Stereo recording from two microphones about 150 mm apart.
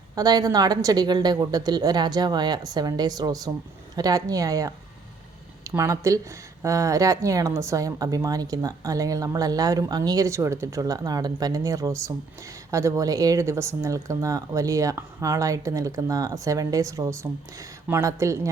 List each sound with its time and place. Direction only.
0.2 s a woman's voice: 25° right (ahead or behind)